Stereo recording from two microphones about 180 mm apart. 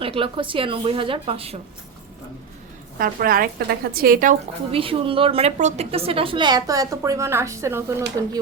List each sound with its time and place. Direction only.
0.0 s a woman's voice: 30° right (ahead or behind)
3.0 s a woman's voice: 50° right (ahead or behind)
4.7 s a woman's voice: 30° right (ahead or behind); by 7.9 s 15° right (ahead or behind)